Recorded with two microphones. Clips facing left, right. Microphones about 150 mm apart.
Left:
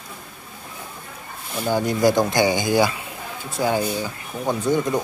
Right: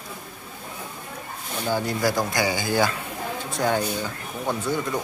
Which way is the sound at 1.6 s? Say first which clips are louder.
Left 5 dB; 15° left (ahead or behind).